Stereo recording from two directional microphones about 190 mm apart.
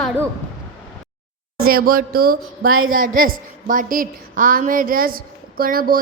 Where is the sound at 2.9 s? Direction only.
45° right (ahead or behind).